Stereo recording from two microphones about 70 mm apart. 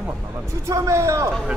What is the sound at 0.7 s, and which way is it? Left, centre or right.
Speech, right.